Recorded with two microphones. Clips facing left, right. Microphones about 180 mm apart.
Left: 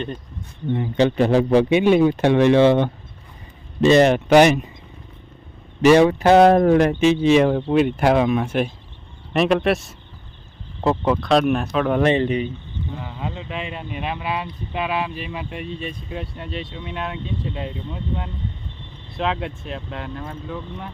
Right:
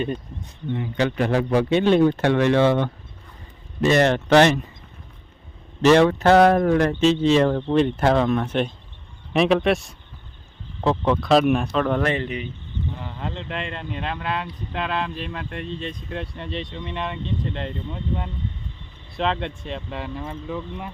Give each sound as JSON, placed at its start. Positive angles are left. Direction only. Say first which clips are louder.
{"t": 0.9, "sound": "a man's voice", "louder": "left 5 dB", "side_deg": 25}
{"t": 1.7, "sound": "speech", "louder": "left 2 dB", "side_deg": 10}
{"t": 5.8, "sound": "speech", "louder": "left 2 dB", "side_deg": 10}
{"t": 12.0, "sound": "a man's voice", "louder": "left 6 dB", "side_deg": 25}
{"t": 13.0, "sound": "speech", "louder": "left 1 dB", "side_deg": 5}